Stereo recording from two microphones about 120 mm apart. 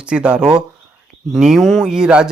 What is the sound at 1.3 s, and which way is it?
Speech, 5° right (ahead or behind).